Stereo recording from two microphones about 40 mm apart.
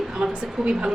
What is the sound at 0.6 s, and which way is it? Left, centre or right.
Speech, right.